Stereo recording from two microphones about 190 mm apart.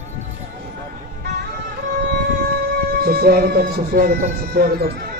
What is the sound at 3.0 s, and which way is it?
Speech, 50° right (ahead or behind).